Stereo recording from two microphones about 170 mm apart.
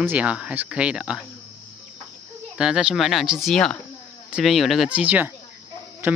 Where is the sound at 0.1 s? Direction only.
5° right (ahead or behind).